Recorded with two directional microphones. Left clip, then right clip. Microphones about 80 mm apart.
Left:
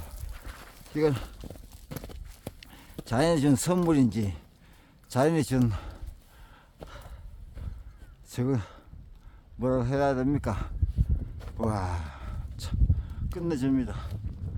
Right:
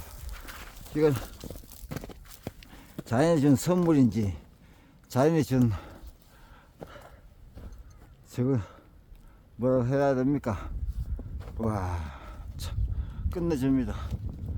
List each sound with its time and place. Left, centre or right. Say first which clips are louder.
0.3 s dog: right 6 dB; right
0.9 s speech: right 1 dB; left
1.9 s horse: right 2 dB; centre
2.9 s speech: right 1 dB; centre
6.8 s horse: right 1 dB; left
8.3 s speech: right 1 dB; left; by 12.0 s centre
12.0 s a sound: even; centre